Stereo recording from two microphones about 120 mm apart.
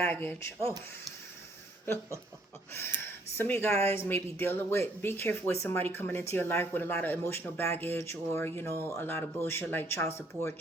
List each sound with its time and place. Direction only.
0.0 s speech: 15° left (ahead or behind)
2.7 s speech: 20° left (ahead or behind)